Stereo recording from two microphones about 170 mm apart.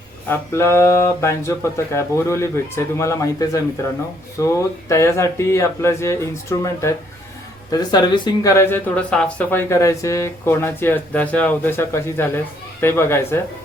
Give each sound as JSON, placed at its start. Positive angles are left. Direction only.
{"t": 0.3, "sound": "speech", "side_deg": 15}